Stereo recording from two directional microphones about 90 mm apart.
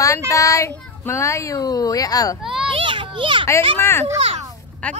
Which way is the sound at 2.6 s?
75° right (ahead or behind).